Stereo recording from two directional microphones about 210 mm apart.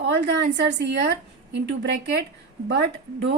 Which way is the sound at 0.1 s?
55° right (ahead or behind).